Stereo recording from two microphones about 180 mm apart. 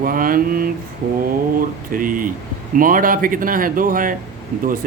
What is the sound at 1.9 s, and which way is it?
Speech, 50° right (ahead or behind).